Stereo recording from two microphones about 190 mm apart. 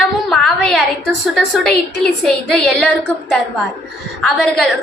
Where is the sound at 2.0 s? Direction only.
5° left (ahead or behind).